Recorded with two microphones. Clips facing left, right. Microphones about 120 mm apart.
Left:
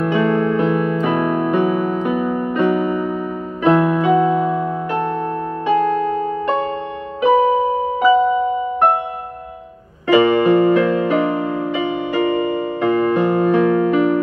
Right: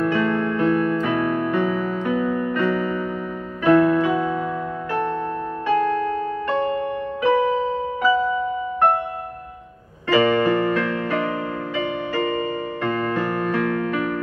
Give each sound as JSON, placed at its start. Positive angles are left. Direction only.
{"t": 0.0, "sound": "music", "side_deg": 20}
{"t": 10.0, "sound": "music", "side_deg": 15}